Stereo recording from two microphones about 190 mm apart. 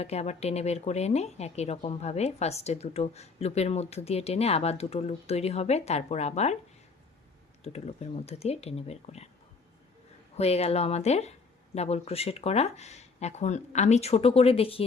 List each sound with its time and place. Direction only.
0.0 s speech: 35° left (ahead or behind)
7.6 s speech: 35° left (ahead or behind)
10.3 s speech: 35° left (ahead or behind)